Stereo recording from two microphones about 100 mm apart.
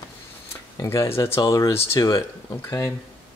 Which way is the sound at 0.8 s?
30° left (ahead or behind).